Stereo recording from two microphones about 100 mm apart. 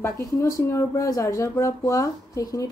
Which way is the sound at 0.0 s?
30° left (ahead or behind).